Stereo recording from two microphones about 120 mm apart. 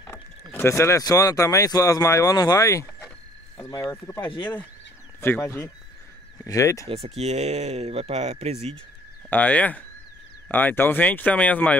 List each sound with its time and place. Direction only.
0.0 s speech: 20° left (ahead or behind)
6.9 s speech: 60° right (ahead or behind)
9.3 s speech: 15° left (ahead or behind)